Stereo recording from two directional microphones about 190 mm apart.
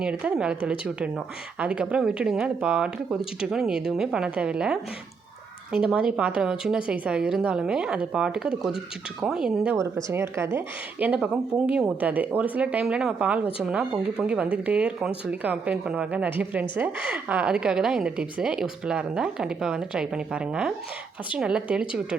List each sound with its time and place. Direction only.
0.0 s a woman's voice: 5° right (ahead or behind)
9.7 s a woman's voice: 15° right (ahead or behind)